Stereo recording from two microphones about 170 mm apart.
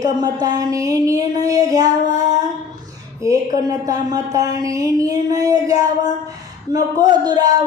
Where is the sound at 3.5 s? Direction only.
20° right (ahead or behind).